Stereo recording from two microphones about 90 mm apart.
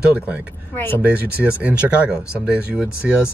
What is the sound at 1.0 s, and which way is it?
Speech, 15° right (ahead or behind).